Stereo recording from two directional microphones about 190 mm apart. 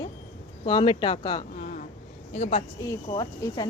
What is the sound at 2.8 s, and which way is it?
Speech, 20° left (ahead or behind).